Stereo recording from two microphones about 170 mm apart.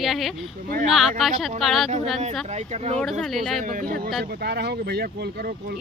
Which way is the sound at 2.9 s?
Centre (ahead or behind).